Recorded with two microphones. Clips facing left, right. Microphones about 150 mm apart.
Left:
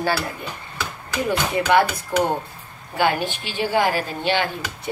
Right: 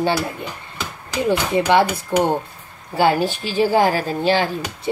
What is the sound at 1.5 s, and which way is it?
A woman's voice, 25° right (ahead or behind).